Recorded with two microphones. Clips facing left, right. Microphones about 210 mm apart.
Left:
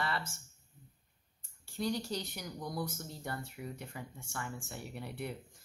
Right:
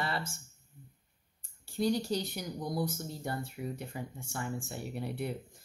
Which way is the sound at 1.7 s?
35° right (ahead or behind).